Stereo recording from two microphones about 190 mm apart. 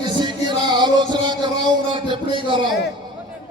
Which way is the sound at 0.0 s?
25° right (ahead or behind).